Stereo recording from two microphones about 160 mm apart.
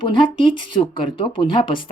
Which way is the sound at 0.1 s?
30° left (ahead or behind).